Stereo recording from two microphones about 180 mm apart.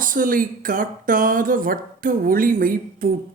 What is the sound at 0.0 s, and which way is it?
Speech, 50° right (ahead or behind).